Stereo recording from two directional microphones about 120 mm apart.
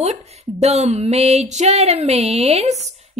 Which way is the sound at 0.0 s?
65° right (ahead or behind).